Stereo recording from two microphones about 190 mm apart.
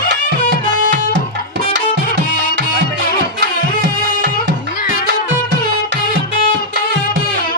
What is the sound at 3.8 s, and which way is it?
Music, 65° right (ahead or behind).